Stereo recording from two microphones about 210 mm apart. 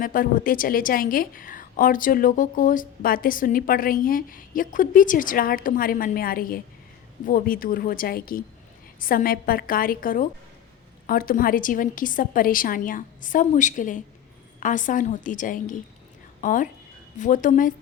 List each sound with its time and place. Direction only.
0.0 s a woman's voice: 40° left (ahead or behind)